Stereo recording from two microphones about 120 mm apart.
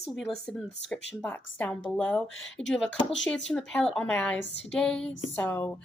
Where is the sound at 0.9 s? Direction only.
10° left (ahead or behind).